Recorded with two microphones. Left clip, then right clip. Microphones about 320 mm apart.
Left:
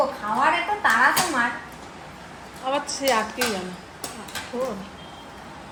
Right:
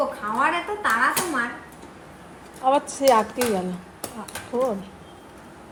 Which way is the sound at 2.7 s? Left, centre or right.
Centre.